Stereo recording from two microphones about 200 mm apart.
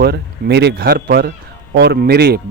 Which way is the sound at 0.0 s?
55° right (ahead or behind).